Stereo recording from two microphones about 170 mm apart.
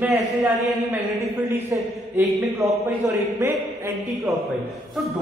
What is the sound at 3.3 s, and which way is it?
Speech, 15° right (ahead or behind).